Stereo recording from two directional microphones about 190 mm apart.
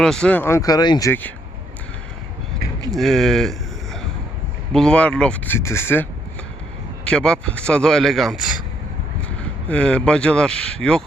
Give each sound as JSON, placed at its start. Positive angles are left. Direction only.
{"t": 0.0, "sound": "speech", "side_deg": 5}
{"t": 2.9, "sound": "speech", "side_deg": 0}
{"t": 4.7, "sound": "speech", "side_deg": 5}
{"t": 9.6, "sound": "speech", "side_deg": 5}